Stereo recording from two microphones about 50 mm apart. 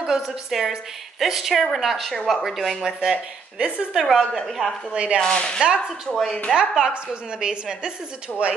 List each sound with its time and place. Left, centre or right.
0.0 s a woman's voice: centre
3.0 s a woman's voice: centre
4.9 s speech: right
5.2 s speech: centre
6.5 s a woman's voice: centre